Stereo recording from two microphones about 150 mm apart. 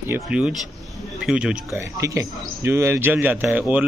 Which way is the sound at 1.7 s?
20° right (ahead or behind).